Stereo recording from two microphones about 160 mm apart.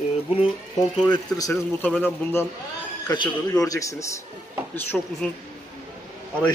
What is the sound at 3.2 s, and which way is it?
A man's voice, 20° left (ahead or behind).